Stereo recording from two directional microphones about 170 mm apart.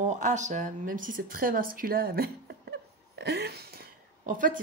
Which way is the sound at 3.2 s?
75° right (ahead or behind).